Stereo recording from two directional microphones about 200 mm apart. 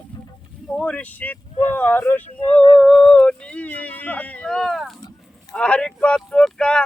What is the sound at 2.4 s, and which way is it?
Yodeling, 25° left (ahead or behind).